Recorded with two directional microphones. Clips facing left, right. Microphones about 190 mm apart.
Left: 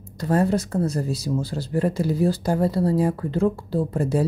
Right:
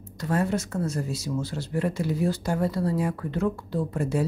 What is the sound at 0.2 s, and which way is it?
Speech, 35° left (ahead or behind).